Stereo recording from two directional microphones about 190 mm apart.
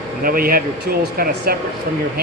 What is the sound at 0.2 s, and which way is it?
Speech, 50° right (ahead or behind).